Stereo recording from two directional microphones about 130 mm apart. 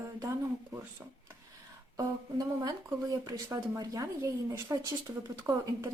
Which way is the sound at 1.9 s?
25° right (ahead or behind).